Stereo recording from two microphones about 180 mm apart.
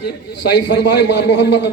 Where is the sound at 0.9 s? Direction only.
70° left (ahead or behind).